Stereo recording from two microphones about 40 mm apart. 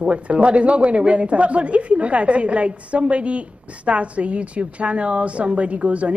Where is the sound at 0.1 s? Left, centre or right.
Right.